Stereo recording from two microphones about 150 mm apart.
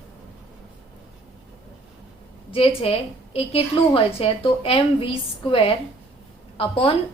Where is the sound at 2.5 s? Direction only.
40° left (ahead or behind).